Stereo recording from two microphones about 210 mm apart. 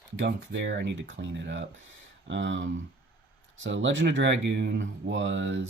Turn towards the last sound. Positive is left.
turn(degrees=-60)  # may be behind; listen again after turning